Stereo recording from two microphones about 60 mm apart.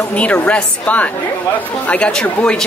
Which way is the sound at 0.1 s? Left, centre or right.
Left.